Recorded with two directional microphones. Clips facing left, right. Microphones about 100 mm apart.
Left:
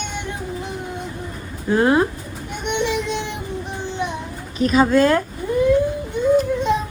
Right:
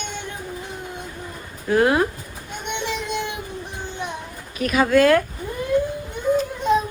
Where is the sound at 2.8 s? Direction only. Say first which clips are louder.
Left 3 dB; 50° right (ahead or behind).